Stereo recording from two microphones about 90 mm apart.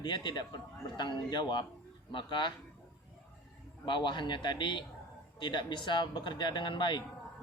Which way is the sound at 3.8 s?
60° left (ahead or behind).